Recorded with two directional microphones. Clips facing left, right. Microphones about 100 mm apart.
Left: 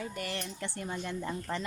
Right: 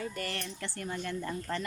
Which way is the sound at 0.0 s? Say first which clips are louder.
Even; 15° left (ahead or behind).